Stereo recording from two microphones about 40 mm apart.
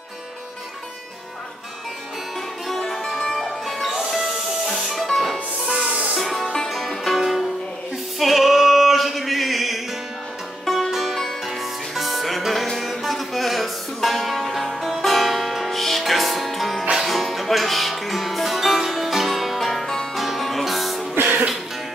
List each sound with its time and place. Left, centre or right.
2.7 s music: centre
5.7 s music: centre
6.1 s music: centre
7.2 s music: centre
8.2 s male singing: centre
10.6 s music: centre
21.1 s music: right